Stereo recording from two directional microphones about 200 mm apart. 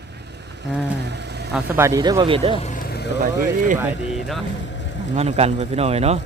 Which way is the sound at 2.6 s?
35° left (ahead or behind).